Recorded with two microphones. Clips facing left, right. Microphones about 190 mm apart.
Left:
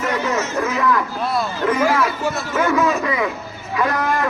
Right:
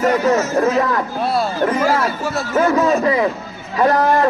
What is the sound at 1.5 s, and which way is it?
A man's voice, 40° right (ahead or behind).